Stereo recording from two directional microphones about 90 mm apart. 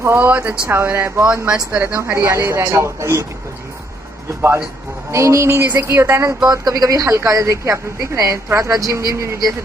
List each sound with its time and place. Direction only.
0.0 s speech: 25° right (ahead or behind)
1.3 s speech: 15° right (ahead or behind)
1.8 s a woman's voice: 30° right (ahead or behind)
5.1 s a woman's voice: 35° right (ahead or behind)
6.5 s a woman's voice: 45° right (ahead or behind)